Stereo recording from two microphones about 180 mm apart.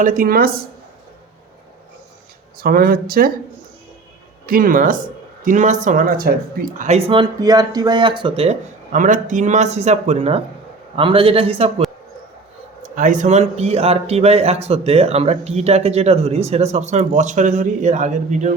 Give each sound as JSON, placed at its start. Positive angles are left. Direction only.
{"t": 0.0, "sound": "speech", "side_deg": -50}
{"t": 2.6, "sound": "speech", "side_deg": -55}
{"t": 4.4, "sound": "speech", "side_deg": -50}
{"t": 7.1, "sound": "speech", "side_deg": -25}
{"t": 13.0, "sound": "speech", "side_deg": -45}